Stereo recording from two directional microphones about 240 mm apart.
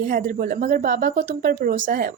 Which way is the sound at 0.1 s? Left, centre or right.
Right.